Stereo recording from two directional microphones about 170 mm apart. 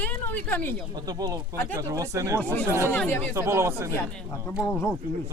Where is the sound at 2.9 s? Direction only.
10° left (ahead or behind).